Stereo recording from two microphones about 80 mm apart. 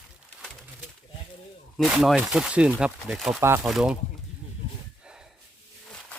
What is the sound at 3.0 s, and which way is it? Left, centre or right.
Speech, centre.